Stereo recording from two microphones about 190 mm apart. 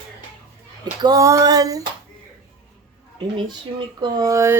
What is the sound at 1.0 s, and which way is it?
Female singing, 15° right (ahead or behind).